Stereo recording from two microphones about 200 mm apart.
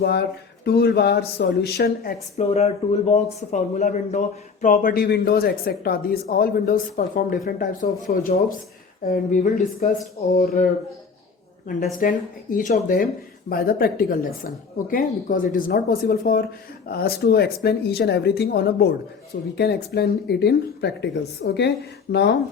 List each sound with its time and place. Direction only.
0.0 s speech: 55° left (ahead or behind)
2.4 s speech: 30° left (ahead or behind); by 10.7 s 50° left (ahead or behind)
11.9 s speech: 45° left (ahead or behind)